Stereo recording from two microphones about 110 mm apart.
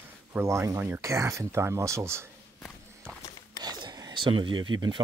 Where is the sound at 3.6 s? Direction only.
40° right (ahead or behind).